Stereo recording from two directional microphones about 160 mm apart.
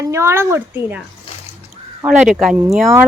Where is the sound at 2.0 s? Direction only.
5° right (ahead or behind).